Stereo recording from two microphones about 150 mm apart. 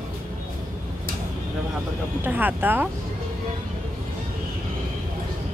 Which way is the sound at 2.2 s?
10° right (ahead or behind).